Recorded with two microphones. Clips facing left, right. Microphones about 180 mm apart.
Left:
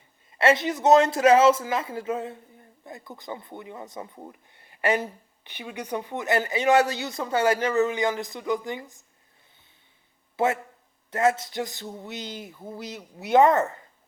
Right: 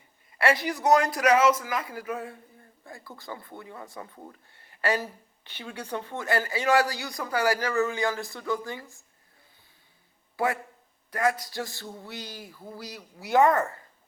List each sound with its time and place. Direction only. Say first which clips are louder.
0.3 s a man's voice: left 4 dB; 25° left (ahead or behind)
10.3 s a man's voice: left 3 dB; 25° left (ahead or behind)